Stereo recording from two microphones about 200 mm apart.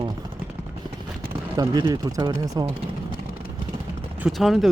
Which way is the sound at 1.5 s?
20° right (ahead or behind).